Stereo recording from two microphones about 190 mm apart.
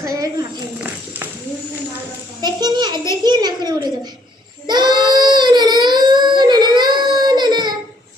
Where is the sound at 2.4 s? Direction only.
20° right (ahead or behind).